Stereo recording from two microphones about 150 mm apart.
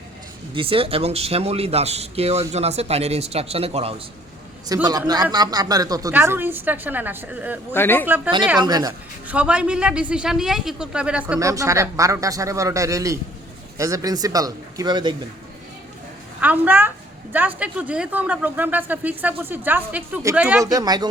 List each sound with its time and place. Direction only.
0.5 s speech: 35° right (ahead or behind)
4.7 s a man's voice: 25° right (ahead or behind); by 7.6 s 10° right (ahead or behind)
7.7 s speech: 15° left (ahead or behind)
8.0 s speech: 10° right (ahead or behind)
8.5 s a man's voice: 25° right (ahead or behind)
9.2 s speech: 10° right (ahead or behind)
11.3 s a man's voice: 20° right (ahead or behind)
16.4 s speech: 10° right (ahead or behind)
20.6 s a man's voice: 25° right (ahead or behind)